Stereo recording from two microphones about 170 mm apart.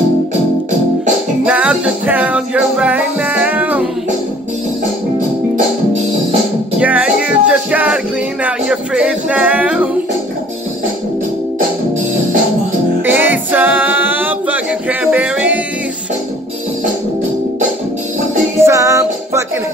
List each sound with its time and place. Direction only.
1.4 s music: 5° right (ahead or behind)
6.8 s music: 5° right (ahead or behind)
13.0 s a capella: 10° right (ahead or behind)
18.6 s music: 15° right (ahead or behind)